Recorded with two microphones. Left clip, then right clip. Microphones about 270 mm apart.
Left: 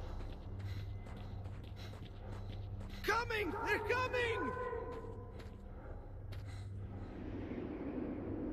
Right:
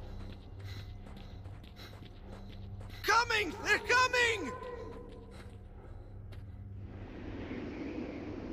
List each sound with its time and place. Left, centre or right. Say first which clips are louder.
2.9 s a man's voice: right 8 dB; centre
7.1 s a sound: right 3 dB; right
7.6 s vehicle: right 1 dB; right